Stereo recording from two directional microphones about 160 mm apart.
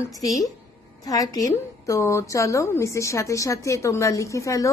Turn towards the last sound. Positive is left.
turn(degrees=20)  # may be behind; listen again after turning